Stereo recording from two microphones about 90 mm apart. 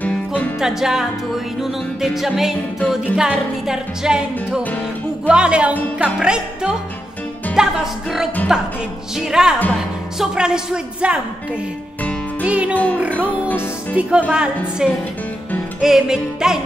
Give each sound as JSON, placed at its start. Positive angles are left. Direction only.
{"t": 0.0, "sound": "music", "side_deg": 15}
{"t": 0.6, "sound": "music", "side_deg": -5}
{"t": 12.0, "sound": "music", "side_deg": 15}
{"t": 12.4, "sound": "music", "side_deg": -15}
{"t": 12.7, "sound": "speech", "side_deg": 20}
{"t": 13.2, "sound": "music", "side_deg": -15}